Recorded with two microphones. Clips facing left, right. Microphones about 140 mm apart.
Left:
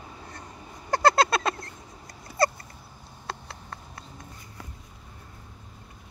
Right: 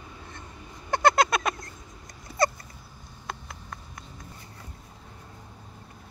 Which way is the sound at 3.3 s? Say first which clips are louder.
Left 1 dB; 30° left (ahead or behind).